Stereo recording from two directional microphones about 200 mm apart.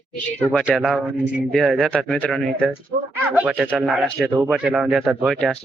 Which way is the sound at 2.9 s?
50° right (ahead or behind).